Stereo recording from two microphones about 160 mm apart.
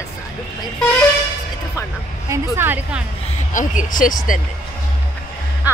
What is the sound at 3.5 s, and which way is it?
Speech, 50° left (ahead or behind).